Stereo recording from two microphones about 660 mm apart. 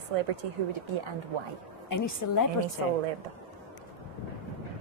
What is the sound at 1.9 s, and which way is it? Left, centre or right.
Speech, left.